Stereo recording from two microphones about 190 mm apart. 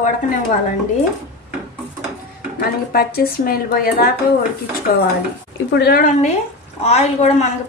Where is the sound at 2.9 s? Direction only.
50° left (ahead or behind).